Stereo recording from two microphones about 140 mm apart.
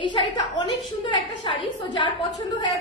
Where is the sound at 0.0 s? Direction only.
35° left (ahead or behind).